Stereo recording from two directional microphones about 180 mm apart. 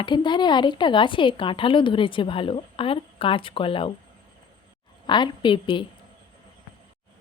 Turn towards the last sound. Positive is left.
turn(degrees=25)  # may be behind; listen again after turning